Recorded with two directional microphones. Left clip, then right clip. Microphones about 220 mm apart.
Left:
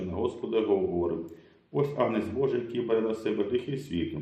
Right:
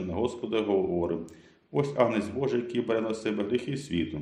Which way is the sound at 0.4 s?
40° right (ahead or behind).